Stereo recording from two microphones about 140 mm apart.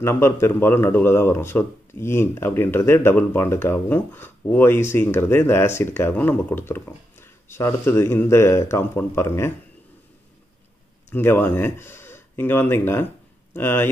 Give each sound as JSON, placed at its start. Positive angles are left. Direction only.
{"t": 0.0, "sound": "speech", "side_deg": 20}
{"t": 11.1, "sound": "speech", "side_deg": 15}